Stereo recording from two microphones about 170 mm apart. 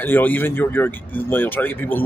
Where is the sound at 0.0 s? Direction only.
10° left (ahead or behind).